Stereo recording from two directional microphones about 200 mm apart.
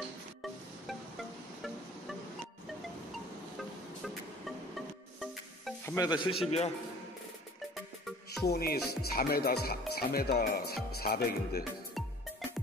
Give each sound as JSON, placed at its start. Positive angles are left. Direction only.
{"t": 0.4, "sound": "music", "side_deg": 0}
{"t": 4.0, "sound": "music", "side_deg": 0}
{"t": 5.9, "sound": "speech", "side_deg": 20}
{"t": 8.3, "sound": "speech", "side_deg": 50}